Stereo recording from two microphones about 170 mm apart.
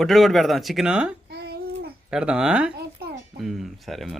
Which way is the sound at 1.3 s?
70° right (ahead or behind).